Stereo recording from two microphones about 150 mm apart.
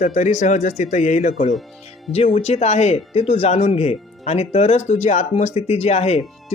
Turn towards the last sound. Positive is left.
turn(degrees=45)  # may be behind; listen again after turning